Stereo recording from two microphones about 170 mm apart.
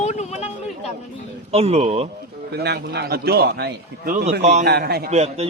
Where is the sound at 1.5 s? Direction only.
40° right (ahead or behind).